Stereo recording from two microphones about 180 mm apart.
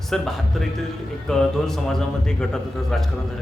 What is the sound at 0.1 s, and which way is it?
Speech, 5° left (ahead or behind).